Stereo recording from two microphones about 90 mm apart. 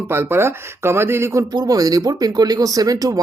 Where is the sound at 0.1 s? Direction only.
25° right (ahead or behind).